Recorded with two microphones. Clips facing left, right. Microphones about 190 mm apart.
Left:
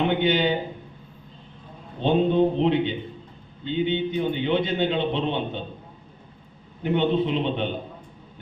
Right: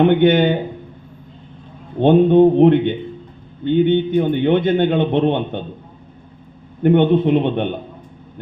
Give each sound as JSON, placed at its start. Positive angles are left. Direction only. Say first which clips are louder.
{"t": 0.0, "sound": "a man's voice", "louder": "right 9 dB", "side_deg": -55}
{"t": 2.0, "sound": "a man's voice", "louder": "right 9 dB", "side_deg": -55}
{"t": 6.8, "sound": "a man's voice", "louder": "right 9 dB", "side_deg": -55}